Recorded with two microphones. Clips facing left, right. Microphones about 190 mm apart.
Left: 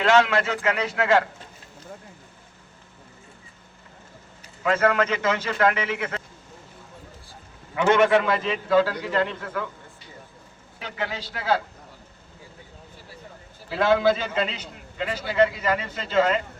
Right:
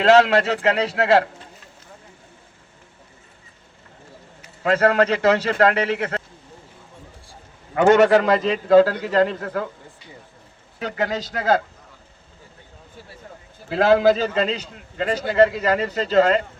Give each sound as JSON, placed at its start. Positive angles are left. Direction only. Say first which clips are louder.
{"t": 0.0, "sound": "a man's voice", "louder": "right 5 dB", "side_deg": -35}
{"t": 4.6, "sound": "a man's voice", "louder": "right 4 dB", "side_deg": -35}
{"t": 7.8, "sound": "a man's voice", "louder": "right 5 dB", "side_deg": -40}
{"t": 10.8, "sound": "a man's voice", "louder": "right 7 dB", "side_deg": -45}
{"t": 13.7, "sound": "a man's voice", "louder": "right 4 dB", "side_deg": -35}